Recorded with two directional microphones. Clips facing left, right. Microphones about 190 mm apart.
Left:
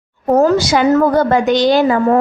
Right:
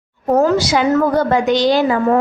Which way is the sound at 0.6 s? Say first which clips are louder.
Left 3 dB; 50° left (ahead or behind).